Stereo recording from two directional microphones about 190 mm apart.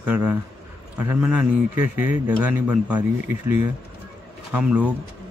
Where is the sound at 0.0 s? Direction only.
10° right (ahead or behind).